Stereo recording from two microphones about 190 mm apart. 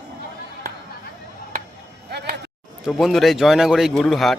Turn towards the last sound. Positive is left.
turn(degrees=0)  # may be behind; listen again after turning